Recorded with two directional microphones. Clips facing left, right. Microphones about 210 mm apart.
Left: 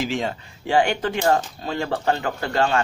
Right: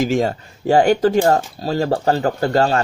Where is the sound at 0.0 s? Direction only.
45° right (ahead or behind).